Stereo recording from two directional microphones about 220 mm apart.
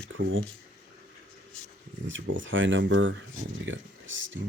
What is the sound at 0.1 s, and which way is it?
Speech, 60° right (ahead or behind).